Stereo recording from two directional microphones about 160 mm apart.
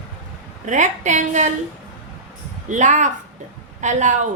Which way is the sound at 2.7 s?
50° right (ahead or behind).